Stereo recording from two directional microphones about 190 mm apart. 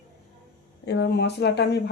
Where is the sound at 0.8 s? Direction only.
65° left (ahead or behind).